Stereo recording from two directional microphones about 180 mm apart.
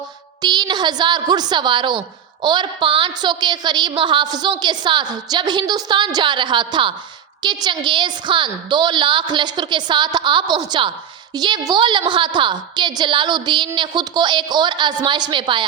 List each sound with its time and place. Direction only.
0.4 s a woman's voice: 25° right (ahead or behind)